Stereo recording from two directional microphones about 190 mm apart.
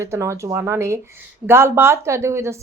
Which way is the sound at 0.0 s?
15° right (ahead or behind).